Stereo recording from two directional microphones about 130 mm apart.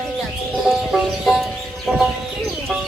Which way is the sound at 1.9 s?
5° right (ahead or behind).